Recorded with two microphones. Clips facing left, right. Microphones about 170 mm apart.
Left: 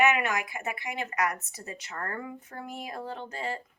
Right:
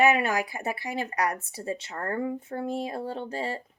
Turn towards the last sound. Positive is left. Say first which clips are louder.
# right 3 dB
turn(degrees=-30)  # may be behind; listen again after turning